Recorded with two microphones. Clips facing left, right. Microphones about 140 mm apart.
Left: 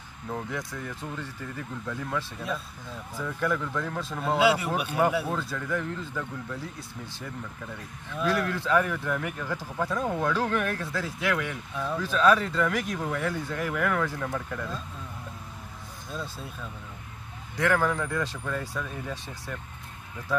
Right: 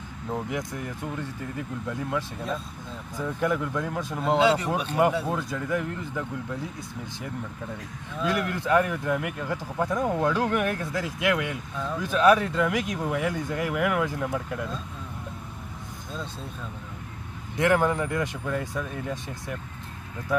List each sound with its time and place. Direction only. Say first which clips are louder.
0.3 s speech: right 3 dB; 20° right (ahead or behind)
1.9 s speech: right 2 dB; 15° right (ahead or behind)
4.4 s speech: right 1 dB; 10° left (ahead or behind)
5.2 s speech: right 2 dB; 20° right (ahead or behind)
8.2 s speech: even; 20° right (ahead or behind)
17.6 s speech: right 3 dB; 20° right (ahead or behind)